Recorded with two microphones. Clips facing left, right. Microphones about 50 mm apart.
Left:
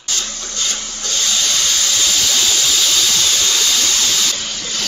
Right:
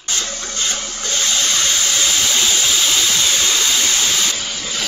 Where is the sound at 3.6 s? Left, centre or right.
Right.